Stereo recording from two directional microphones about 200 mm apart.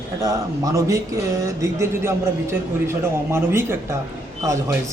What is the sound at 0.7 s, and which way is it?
Speech, 15° right (ahead or behind).